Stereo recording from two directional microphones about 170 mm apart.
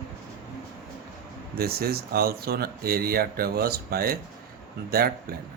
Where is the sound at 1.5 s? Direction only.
65° right (ahead or behind).